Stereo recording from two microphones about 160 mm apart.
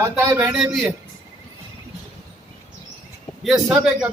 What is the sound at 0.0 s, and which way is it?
Speech, 15° right (ahead or behind).